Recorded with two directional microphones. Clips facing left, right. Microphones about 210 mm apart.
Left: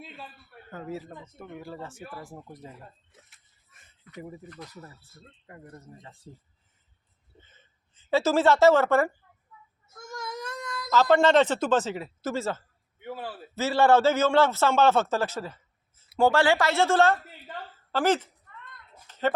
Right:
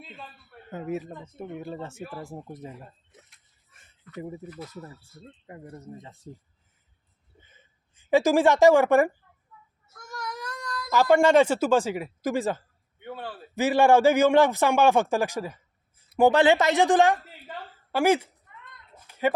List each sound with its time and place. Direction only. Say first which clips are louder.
0.7 s speech: right 5 dB; 20° right (ahead or behind)
4.4 s a man's voice: right 4 dB; 5° right (ahead or behind)
5.5 s speech: right 4 dB; 20° right (ahead or behind)
7.4 s a sound: right 1 dB; 10° right (ahead or behind)
10.1 s a sound: even; 25° left (ahead or behind)
10.9 s a man's voice: right 1 dB; 10° right (ahead or behind)
13.0 s a man's voice: even; 5° left (ahead or behind)
13.6 s a man's voice: right 2 dB; 15° right (ahead or behind)
19.0 s a sound: right 2 dB; 10° right (ahead or behind)